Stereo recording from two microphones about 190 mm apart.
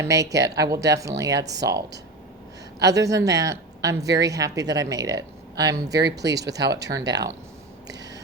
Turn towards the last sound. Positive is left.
turn(degrees=-20)  # may be behind; listen again after turning